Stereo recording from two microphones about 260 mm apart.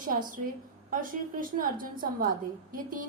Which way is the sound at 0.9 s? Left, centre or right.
Right.